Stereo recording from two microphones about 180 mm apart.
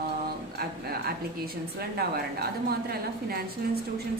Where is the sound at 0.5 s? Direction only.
60° right (ahead or behind).